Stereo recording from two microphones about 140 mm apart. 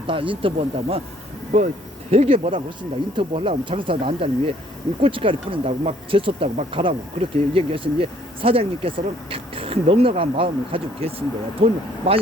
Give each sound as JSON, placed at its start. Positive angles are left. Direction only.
{"t": 0.1, "sound": "speech", "side_deg": -40}